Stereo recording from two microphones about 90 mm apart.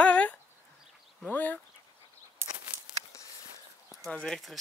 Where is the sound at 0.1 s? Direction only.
15° left (ahead or behind).